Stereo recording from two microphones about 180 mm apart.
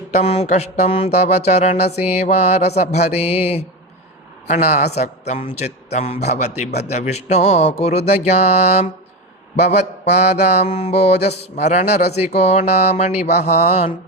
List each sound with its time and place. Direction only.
0.1 s speech: 35° left (ahead or behind)